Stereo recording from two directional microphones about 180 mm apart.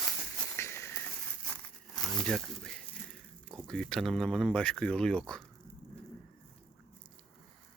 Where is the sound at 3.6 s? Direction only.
5° left (ahead or behind).